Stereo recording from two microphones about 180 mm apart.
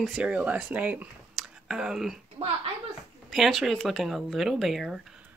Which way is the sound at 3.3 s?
Centre (ahead or behind).